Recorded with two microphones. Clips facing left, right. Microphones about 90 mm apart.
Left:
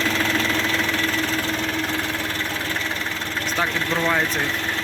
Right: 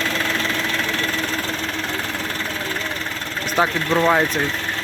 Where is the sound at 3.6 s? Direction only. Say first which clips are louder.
Right 6 dB; 20° right (ahead or behind).